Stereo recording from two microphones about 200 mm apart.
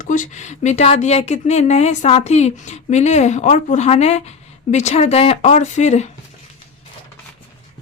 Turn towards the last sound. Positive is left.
turn(degrees=35)  # may be behind; listen again after turning